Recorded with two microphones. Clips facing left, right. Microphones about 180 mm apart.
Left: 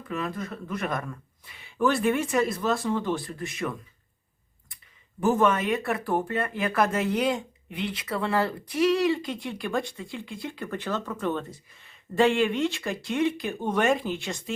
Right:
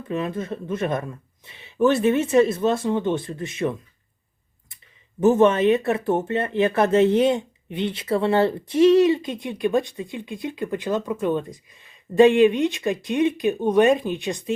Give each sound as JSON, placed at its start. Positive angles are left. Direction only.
{"t": 0.1, "sound": "speech", "side_deg": -25}
{"t": 5.2, "sound": "speech", "side_deg": -25}